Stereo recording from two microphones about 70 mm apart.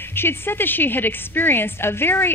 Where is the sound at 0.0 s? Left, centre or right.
Left.